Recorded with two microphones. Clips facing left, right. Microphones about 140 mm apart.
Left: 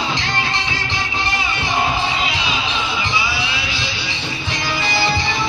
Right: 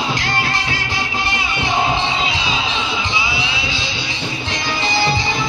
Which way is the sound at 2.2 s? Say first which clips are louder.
Right 1 dB; 25° right (ahead or behind).